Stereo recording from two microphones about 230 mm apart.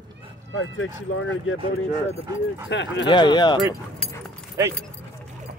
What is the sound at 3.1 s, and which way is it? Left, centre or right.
Speech, centre.